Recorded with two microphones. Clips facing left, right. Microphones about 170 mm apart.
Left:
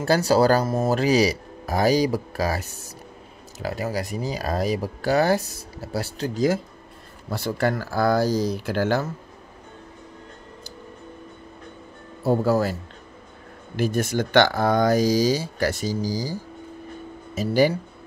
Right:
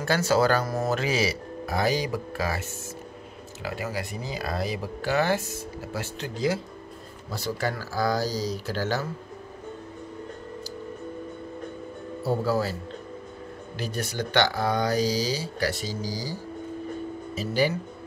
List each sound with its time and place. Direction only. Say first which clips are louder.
0.0 s speech: left 4 dB; 35° left (ahead or behind)
7.2 s speech: left 5 dB; 55° left (ahead or behind)
12.3 s speech: left 5 dB; 45° left (ahead or behind)
13.7 s speech: left 8 dB; 50° left (ahead or behind)